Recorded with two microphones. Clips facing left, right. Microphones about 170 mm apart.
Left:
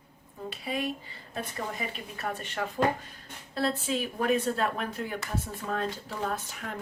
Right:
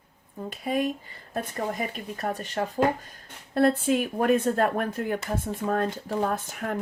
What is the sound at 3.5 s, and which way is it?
A woman's voice, 55° right (ahead or behind).